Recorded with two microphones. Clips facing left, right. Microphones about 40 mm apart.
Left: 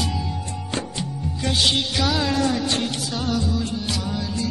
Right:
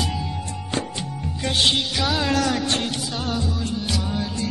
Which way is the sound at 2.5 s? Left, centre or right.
Right.